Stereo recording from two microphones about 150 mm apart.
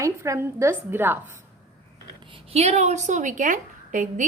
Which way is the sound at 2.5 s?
45° right (ahead or behind).